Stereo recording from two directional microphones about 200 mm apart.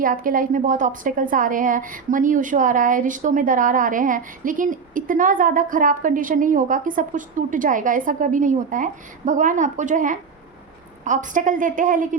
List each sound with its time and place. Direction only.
0.0 s a woman's voice: 45° right (ahead or behind)